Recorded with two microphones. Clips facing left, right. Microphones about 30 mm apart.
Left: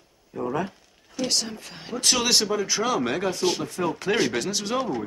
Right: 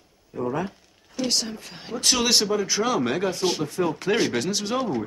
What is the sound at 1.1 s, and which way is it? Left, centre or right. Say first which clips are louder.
Speech: right 1 dB; centre.